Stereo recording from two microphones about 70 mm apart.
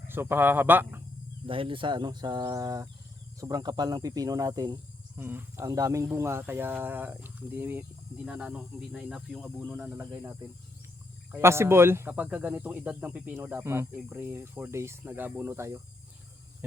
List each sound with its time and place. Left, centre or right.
0.1 s speech: right
2.0 s speech: right
2.4 s speech: right
3.5 s speech: right
5.1 s speech: right
5.6 s speech: right
6.1 s speech: right
8.2 s speech: centre
9.6 s speech: right
11.3 s speech: right
13.5 s speech: right